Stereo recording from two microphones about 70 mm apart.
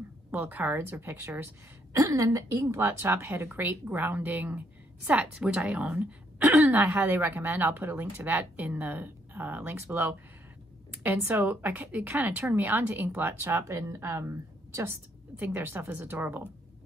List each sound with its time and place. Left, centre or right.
0.3 s a woman's voice: right
2.0 s a woman's voice: right